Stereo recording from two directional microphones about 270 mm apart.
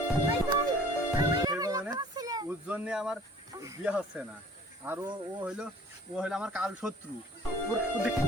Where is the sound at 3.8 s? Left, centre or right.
Centre.